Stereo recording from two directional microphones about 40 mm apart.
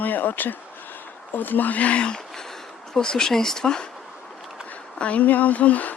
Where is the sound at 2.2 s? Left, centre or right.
Centre.